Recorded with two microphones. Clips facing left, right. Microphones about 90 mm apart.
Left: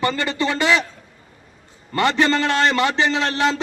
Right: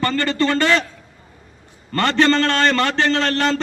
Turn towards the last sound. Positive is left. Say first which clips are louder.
# right 1 dB
turn(degrees=5)  # may be behind; listen again after turning